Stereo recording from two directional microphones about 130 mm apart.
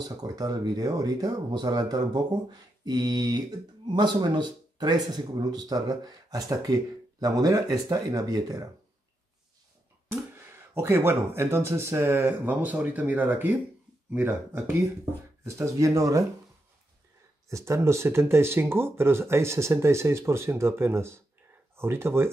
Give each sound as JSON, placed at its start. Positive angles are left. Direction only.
{"t": 0.0, "sound": "speech", "side_deg": -30}
{"t": 2.8, "sound": "mantra", "side_deg": -30}
{"t": 3.9, "sound": "speech", "side_deg": -35}
{"t": 10.3, "sound": "speech", "side_deg": -20}
{"t": 17.5, "sound": "speech", "side_deg": -20}